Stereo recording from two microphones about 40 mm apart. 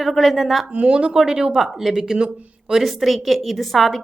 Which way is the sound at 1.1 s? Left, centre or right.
Centre.